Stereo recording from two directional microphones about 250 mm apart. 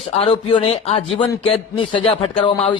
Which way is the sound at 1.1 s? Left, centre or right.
Centre.